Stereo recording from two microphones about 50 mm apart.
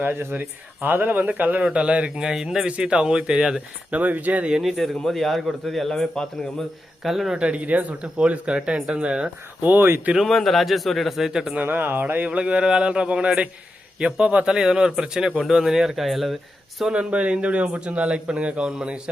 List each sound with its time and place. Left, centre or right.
0.0 s speech: right
1.6 s a man's voice: right
2.3 s speech: centre
2.6 s speech: right
3.9 s speech: right
4.6 s a man's voice: centre
7.0 s a man's voice: centre
7.3 s a man's voice: right
8.4 s a man's voice: centre
9.6 s speech: right
10.2 s a man's voice: centre
11.6 s speech: right
12.3 s a man's voice: right; by 16.9 s centre
16.9 s a man's voice: right